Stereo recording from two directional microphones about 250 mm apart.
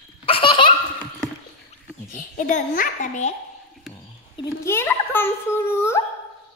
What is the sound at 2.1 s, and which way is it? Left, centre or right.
A child's voice, left.